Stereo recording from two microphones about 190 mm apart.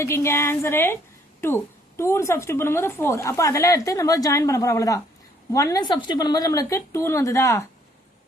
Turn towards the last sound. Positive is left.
turn(degrees=15)  # may be behind; listen again after turning